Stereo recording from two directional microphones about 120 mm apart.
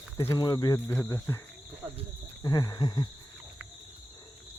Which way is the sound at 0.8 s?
25° left (ahead or behind).